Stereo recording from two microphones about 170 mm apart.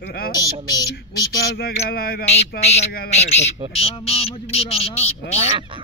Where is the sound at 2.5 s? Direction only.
40° left (ahead or behind).